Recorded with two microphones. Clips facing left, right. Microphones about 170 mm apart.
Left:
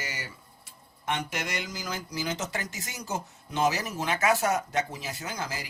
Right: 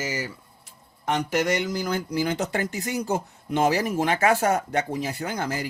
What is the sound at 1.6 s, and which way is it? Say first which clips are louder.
Speech: right 9 dB; 60° right (ahead or behind).